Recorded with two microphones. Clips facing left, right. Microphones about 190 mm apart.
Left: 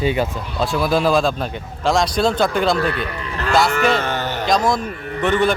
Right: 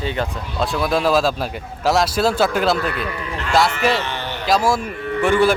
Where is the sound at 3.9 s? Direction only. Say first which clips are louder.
Left 3 dB; 45° left (ahead or behind).